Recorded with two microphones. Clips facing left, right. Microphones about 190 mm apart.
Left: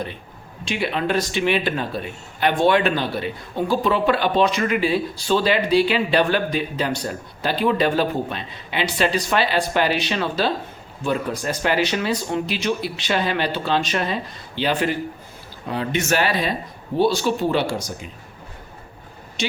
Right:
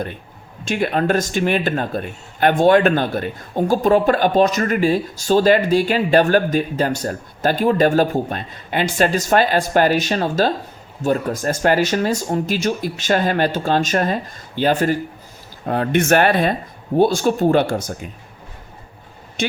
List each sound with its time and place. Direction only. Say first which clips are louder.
0.6 s a man's voice: right 4 dB; 45° right (ahead or behind)
19.4 s speech: right 3 dB; 55° right (ahead or behind)